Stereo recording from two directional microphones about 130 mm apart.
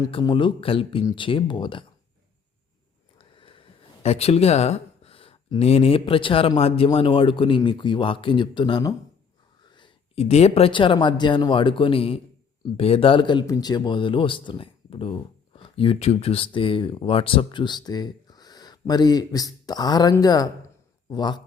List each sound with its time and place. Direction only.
0.1 s speech: 40° left (ahead or behind)
3.2 s a sound: 40° left (ahead or behind)
6.6 s speech: 45° left (ahead or behind); by 9.0 s 30° left (ahead or behind)
9.6 s whispering: 35° left (ahead or behind)
10.2 s speech: 55° left (ahead or behind); by 21.4 s 35° left (ahead or behind)